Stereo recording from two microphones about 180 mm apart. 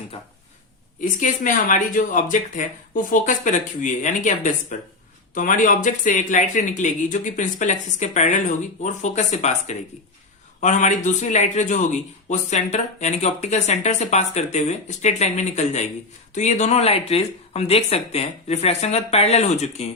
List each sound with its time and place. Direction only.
1.0 s a man's voice: 45° left (ahead or behind)